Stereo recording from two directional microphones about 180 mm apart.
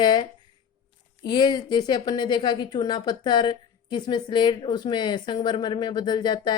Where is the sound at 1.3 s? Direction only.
25° left (ahead or behind).